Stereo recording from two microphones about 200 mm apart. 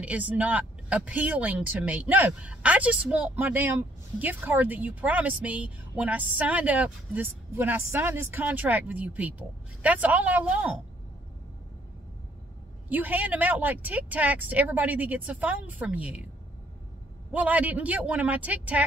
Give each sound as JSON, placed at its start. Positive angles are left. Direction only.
{"t": 0.0, "sound": "a woman's voice", "side_deg": -5}
{"t": 12.9, "sound": "a woman's voice", "side_deg": -10}
{"t": 17.3, "sound": "a woman's voice", "side_deg": -5}